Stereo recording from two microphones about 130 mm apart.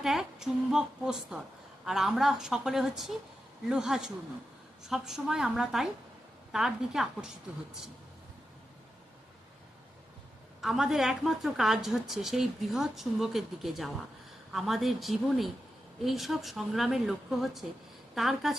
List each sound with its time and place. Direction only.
0.0 s a woman's voice: 5° right (ahead or behind)
10.6 s a woman's voice: 5° right (ahead or behind)